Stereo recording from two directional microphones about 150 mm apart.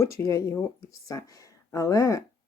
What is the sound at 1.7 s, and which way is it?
Speech, 20° left (ahead or behind).